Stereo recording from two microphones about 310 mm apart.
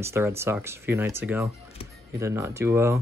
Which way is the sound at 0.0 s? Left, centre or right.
Centre.